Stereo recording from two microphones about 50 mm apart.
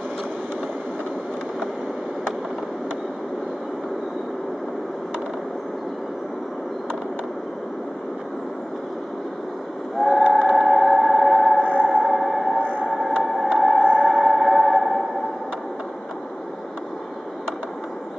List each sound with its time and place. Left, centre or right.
9.9 s train: centre
10.3 s music: centre
11.6 s music: left
12.0 s a sound: centre
12.5 s siren: left
13.0 s music: centre